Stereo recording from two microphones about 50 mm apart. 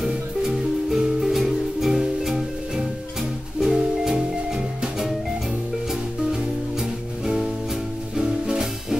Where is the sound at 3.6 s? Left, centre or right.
Centre.